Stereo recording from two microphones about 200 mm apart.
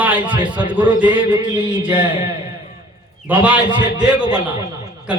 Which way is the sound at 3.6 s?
20° right (ahead or behind).